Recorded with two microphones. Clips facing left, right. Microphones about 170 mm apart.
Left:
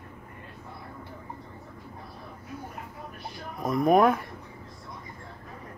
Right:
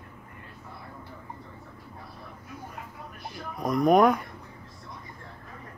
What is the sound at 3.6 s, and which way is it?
Speech, centre (ahead or behind).